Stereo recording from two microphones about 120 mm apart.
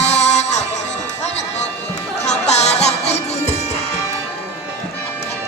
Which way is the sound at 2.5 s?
65° left (ahead or behind).